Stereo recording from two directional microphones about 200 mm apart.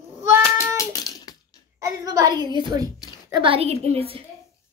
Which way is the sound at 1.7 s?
15° right (ahead or behind).